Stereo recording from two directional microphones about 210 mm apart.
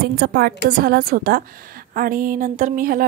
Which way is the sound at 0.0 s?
50° right (ahead or behind).